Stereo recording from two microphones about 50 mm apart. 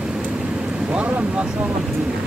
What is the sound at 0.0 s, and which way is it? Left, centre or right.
Vehicle, centre.